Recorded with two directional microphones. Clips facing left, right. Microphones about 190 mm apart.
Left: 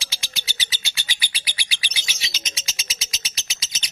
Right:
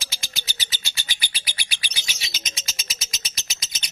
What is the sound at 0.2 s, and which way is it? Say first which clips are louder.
Bird: left 1 dB; 45° right (ahead or behind).